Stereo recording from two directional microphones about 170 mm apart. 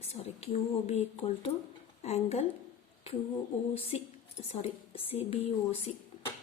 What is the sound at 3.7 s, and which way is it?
Speech, 35° left (ahead or behind).